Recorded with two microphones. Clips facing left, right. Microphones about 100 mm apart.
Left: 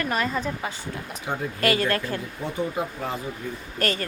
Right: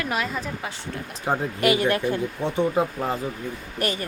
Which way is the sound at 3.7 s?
15° right (ahead or behind).